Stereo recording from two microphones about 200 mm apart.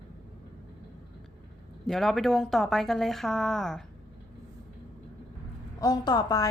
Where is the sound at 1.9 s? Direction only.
Centre (ahead or behind).